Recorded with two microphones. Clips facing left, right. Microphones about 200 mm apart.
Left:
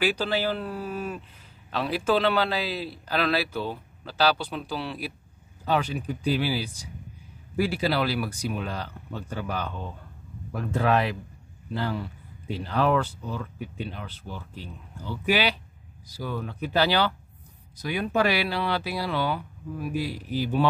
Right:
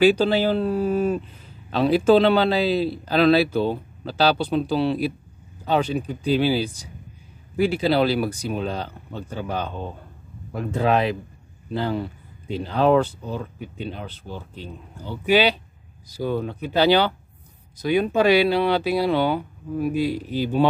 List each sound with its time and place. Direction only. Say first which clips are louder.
0.0 s a man's voice: right 8 dB; 25° right (ahead or behind)